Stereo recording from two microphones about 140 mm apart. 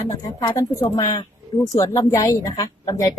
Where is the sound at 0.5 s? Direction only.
25° left (ahead or behind).